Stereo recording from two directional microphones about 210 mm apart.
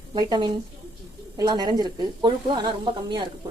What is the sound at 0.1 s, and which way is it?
Speech, 20° right (ahead or behind).